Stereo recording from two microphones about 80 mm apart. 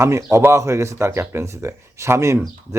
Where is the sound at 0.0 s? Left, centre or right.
Right.